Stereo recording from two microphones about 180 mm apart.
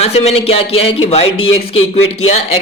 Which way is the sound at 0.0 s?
35° left (ahead or behind).